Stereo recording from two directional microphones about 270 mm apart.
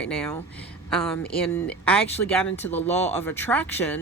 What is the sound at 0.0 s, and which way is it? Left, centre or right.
Speech, centre.